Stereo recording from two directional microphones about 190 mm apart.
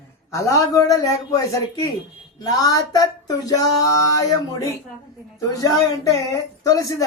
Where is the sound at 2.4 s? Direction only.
20° left (ahead or behind).